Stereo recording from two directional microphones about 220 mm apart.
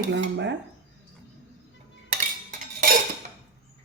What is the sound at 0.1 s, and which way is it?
Speech, 55° right (ahead or behind).